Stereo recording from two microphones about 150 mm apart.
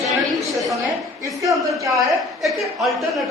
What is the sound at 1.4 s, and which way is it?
Speech, 20° right (ahead or behind).